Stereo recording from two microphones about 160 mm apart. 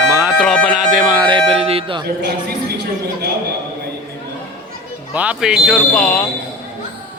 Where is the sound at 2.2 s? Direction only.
90° right.